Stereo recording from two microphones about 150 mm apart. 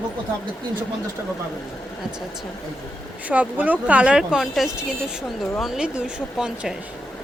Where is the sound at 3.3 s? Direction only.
10° right (ahead or behind).